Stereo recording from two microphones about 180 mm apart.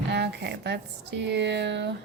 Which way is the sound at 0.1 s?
70° right (ahead or behind).